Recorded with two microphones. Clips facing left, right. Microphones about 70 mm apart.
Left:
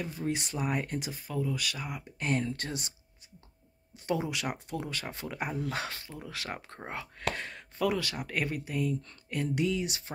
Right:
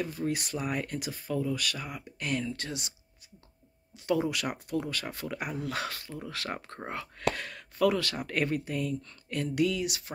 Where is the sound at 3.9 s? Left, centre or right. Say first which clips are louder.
Right 3 dB; left.